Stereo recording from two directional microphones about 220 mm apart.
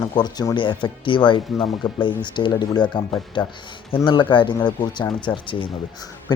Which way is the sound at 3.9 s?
20° left (ahead or behind).